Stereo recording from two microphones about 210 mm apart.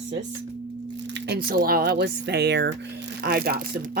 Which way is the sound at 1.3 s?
45° right (ahead or behind).